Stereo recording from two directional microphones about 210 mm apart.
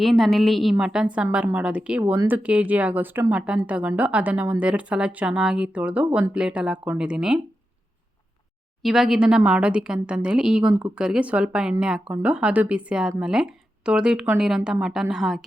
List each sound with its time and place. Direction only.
0.0 s a woman's voice: centre (ahead or behind)
8.8 s speech: centre (ahead or behind)